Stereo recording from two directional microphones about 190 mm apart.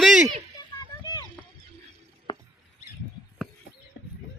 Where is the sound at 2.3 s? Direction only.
25° left (ahead or behind).